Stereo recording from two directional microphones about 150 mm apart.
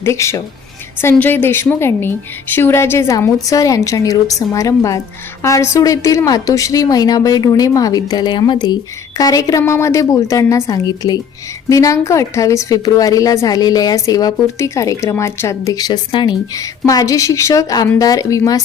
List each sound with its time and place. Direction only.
0.0 s a woman's voice: 20° left (ahead or behind)